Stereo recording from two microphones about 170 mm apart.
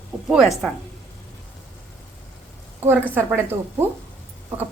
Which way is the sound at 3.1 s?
10° right (ahead or behind).